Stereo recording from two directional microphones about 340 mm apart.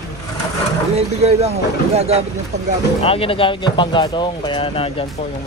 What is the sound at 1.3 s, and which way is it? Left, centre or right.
Speech, centre.